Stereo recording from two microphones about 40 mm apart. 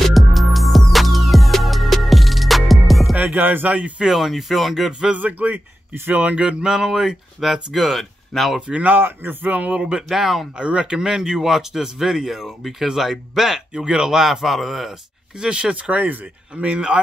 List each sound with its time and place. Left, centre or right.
0.0 s music: centre
3.2 s music: right
4.0 s speech: centre
5.1 s speech: right
6.6 s speech: centre
8.5 s speech: right
8.8 s speech: right
9.5 s speech: right
9.8 s speech: right
10.0 s speech: centre
10.6 s speech: right; by 13.6 s centre
13.7 s speech: right; by 15.0 s centre
15.3 s speech: right
16.9 s speech: right